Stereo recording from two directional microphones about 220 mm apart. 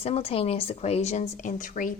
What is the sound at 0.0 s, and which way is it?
Speech, 25° left (ahead or behind).